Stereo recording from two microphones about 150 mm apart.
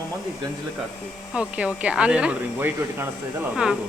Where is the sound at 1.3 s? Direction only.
10° right (ahead or behind).